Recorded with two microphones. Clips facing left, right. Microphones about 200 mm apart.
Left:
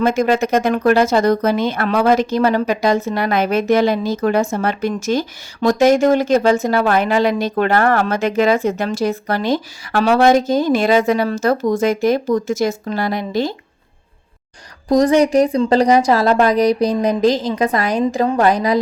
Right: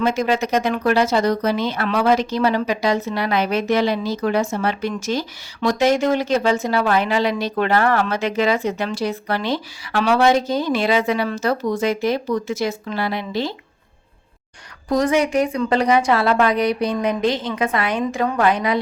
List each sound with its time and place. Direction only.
0.0 s speech: 50° left (ahead or behind)
14.8 s a woman's voice: 35° left (ahead or behind)